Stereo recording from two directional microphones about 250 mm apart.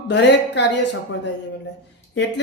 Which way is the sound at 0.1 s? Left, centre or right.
Left.